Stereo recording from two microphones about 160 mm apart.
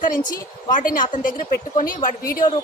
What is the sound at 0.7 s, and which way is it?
A woman's voice, 55° left (ahead or behind).